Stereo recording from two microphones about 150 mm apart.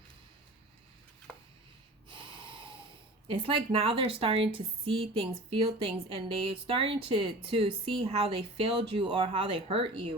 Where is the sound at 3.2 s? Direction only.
40° right (ahead or behind).